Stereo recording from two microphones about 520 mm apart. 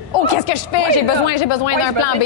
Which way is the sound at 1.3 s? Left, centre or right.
Left.